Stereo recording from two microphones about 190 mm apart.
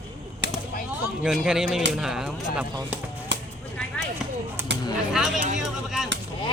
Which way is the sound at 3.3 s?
70° right (ahead or behind).